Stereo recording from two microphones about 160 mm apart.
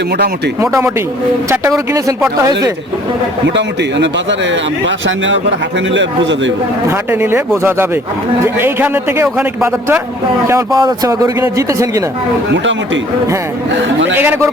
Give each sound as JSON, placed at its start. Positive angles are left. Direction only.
{"t": 1.5, "sound": "speech", "side_deg": -20}
{"t": 3.4, "sound": "a man's voice", "side_deg": -90}
{"t": 7.1, "sound": "a man's voice", "side_deg": -15}
{"t": 10.4, "sound": "speech", "side_deg": -20}
{"t": 14.2, "sound": "a man's voice", "side_deg": -10}